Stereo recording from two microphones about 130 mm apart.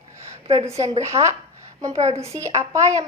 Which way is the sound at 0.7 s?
25° right (ahead or behind).